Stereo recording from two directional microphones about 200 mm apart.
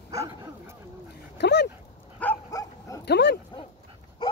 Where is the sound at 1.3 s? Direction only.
60° left (ahead or behind).